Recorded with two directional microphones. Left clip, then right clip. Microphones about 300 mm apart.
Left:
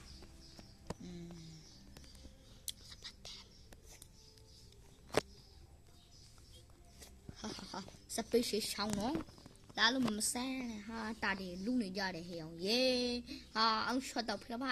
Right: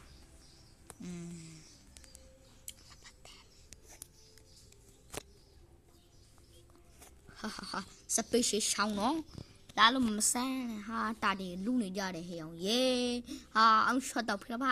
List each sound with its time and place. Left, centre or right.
2.6 s whispering: centre
7.3 s a sound: right
8.1 s a woman's voice: right